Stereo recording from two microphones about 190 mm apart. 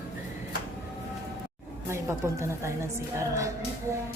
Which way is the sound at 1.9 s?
15° right (ahead or behind).